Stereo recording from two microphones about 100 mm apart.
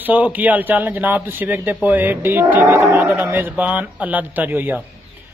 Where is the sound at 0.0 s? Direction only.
15° right (ahead or behind).